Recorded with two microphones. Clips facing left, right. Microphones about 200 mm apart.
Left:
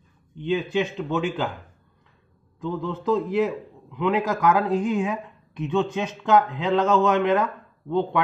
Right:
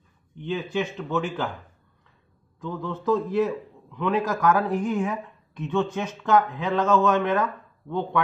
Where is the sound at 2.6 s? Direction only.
15° left (ahead or behind).